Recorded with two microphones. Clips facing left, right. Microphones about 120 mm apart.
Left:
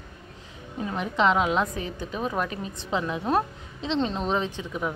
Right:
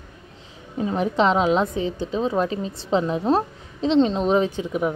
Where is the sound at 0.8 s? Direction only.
30° right (ahead or behind).